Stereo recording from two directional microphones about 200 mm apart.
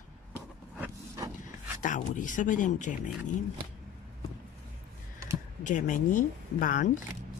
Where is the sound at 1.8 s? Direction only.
40° left (ahead or behind).